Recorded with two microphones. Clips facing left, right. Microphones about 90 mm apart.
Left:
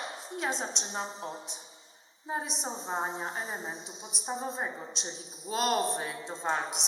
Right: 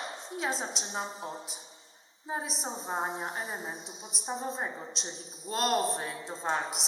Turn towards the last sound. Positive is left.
turn(degrees=0)  # may be behind; listen again after turning